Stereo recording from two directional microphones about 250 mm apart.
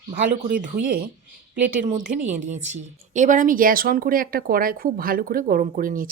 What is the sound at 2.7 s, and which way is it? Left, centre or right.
Speech, right.